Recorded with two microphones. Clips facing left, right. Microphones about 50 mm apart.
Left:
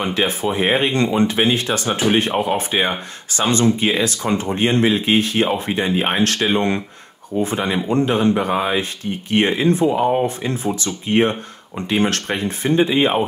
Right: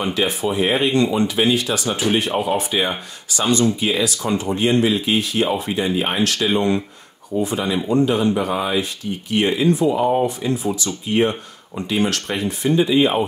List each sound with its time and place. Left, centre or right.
0.0 s speech: left
1.9 s speech: left
2.5 s speech: left
7.4 s speech: left